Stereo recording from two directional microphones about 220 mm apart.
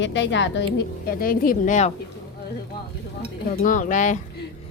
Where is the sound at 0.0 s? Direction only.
55° left (ahead or behind); by 1.9 s 35° left (ahead or behind).